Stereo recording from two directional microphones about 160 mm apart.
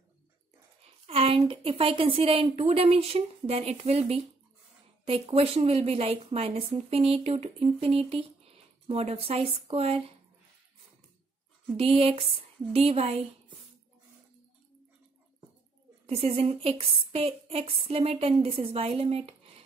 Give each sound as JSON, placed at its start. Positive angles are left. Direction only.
{"t": 0.8, "sound": "a sound", "side_deg": -40}
{"t": 1.5, "sound": "speech", "side_deg": -35}
{"t": 11.7, "sound": "speech", "side_deg": -35}
{"t": 16.1, "sound": "speech", "side_deg": -40}